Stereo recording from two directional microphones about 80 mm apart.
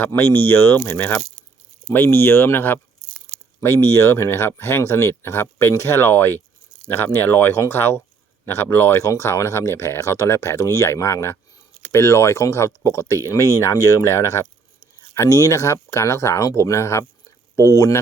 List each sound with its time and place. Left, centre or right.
0.1 s speech: left